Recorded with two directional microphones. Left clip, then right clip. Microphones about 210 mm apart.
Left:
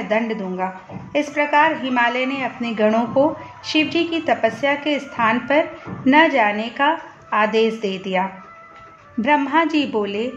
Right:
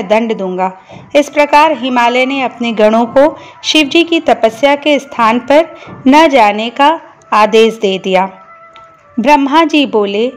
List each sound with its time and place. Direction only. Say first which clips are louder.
0.1 s a woman's voice: right 10 dB; 35° right (ahead or behind)